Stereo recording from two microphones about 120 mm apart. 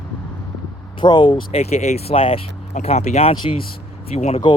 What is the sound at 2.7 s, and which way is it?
Speech, 70° left (ahead or behind).